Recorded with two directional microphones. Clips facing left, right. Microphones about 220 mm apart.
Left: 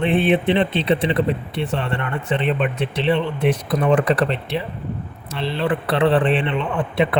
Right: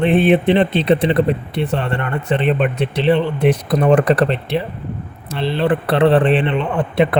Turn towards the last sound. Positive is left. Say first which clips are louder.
# right 4 dB
turn(degrees=-40)  # may be behind; listen again after turning